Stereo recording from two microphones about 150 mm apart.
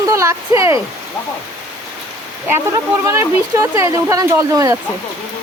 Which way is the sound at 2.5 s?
20° right (ahead or behind).